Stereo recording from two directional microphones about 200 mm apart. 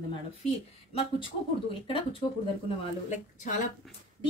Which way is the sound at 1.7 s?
25° left (ahead or behind).